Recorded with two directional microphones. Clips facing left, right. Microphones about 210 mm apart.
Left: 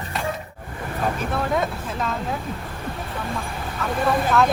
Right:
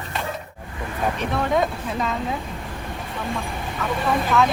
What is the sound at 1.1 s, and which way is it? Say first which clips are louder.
Speech: right 4 dB; centre (ahead or behind).